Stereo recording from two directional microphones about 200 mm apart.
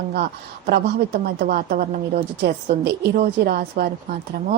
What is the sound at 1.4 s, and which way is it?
A woman's voice, 45° right (ahead or behind).